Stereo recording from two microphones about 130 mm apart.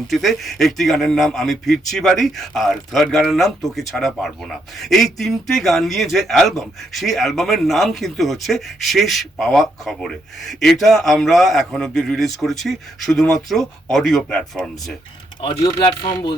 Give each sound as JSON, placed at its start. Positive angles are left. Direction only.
{"t": 0.1, "sound": "speech", "side_deg": 0}
{"t": 15.6, "sound": "speech", "side_deg": 35}